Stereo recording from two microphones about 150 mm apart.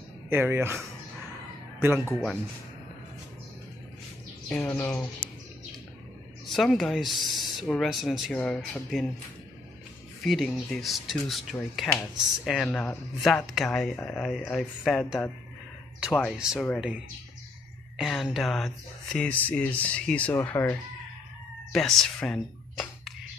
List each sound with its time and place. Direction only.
0.3 s speech: 15° right (ahead or behind)
4.5 s speech: 10° left (ahead or behind)
6.4 s speech: centre (ahead or behind)
10.2 s speech: centre (ahead or behind); by 20.7 s 15° left (ahead or behind)
21.7 s speech: centre (ahead or behind)